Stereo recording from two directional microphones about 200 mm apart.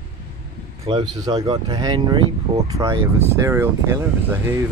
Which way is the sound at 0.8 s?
20° right (ahead or behind).